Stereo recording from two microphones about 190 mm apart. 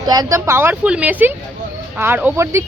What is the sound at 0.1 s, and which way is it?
A woman's voice, 20° right (ahead or behind).